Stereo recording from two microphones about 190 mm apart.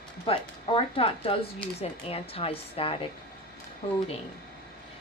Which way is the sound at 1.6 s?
5° left (ahead or behind).